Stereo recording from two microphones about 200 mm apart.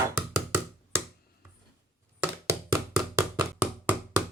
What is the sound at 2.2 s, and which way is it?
Knock, 15° right (ahead or behind).